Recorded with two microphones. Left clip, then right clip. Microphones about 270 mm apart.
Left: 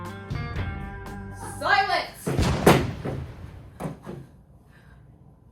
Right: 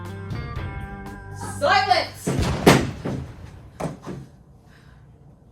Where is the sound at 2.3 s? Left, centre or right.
Centre.